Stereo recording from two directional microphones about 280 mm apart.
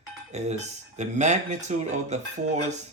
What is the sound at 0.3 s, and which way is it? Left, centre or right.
Speech, right.